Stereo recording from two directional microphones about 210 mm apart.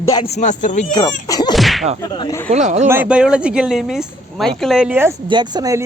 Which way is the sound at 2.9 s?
5° right (ahead or behind).